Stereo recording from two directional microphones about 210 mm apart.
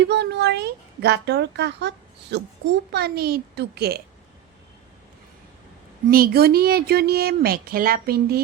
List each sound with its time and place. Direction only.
0.0 s a child's voice: 55° right (ahead or behind)
6.1 s speech: 45° right (ahead or behind)